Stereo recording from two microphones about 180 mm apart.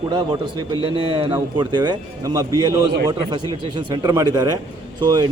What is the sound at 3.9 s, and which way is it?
A man's voice, 20° right (ahead or behind).